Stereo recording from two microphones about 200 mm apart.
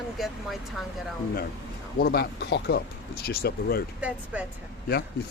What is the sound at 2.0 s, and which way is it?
Speech, 50° left (ahead or behind).